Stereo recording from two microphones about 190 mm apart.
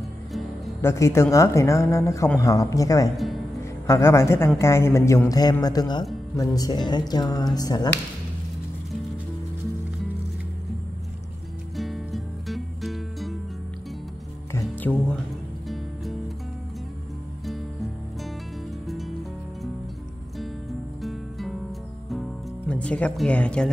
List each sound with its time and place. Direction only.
0.3 s music: centre (ahead or behind)
0.8 s speech: 15° left (ahead or behind)
11.7 s music: centre (ahead or behind)
14.5 s music: 10° left (ahead or behind)
18.9 s music: centre (ahead or behind)
21.0 s music: centre (ahead or behind)
22.7 s speech: 5° left (ahead or behind)